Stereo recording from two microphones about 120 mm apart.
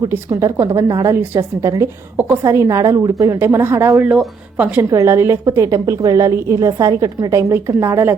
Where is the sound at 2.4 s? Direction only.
25° right (ahead or behind).